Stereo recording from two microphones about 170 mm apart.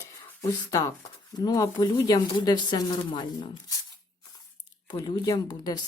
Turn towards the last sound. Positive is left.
turn(degrees=20)  # may be behind; listen again after turning